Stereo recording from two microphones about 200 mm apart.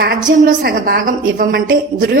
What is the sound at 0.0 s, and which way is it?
A woman's voice, 50° right (ahead or behind).